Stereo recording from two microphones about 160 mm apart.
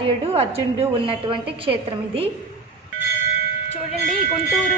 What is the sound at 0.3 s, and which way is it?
A woman's voice, 35° right (ahead or behind).